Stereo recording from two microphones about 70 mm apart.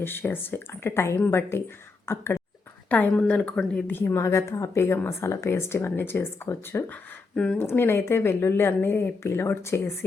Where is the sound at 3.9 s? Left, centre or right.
Left.